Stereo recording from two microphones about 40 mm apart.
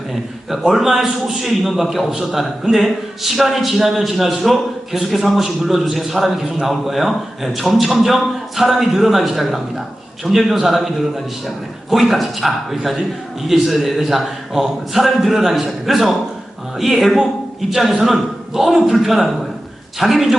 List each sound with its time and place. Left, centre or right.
0.1 s a man's voice: centre